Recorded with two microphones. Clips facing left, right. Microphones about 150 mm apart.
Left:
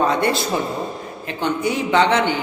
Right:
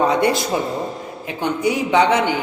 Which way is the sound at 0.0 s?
15° right (ahead or behind).